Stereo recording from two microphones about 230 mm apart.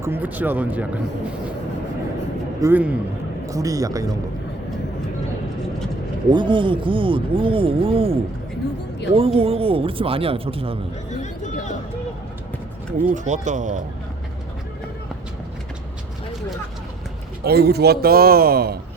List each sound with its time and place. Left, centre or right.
0.0 s speech: centre
2.6 s speech: centre
6.3 s speech: right
13.0 s speech: right
17.4 s a man's voice: right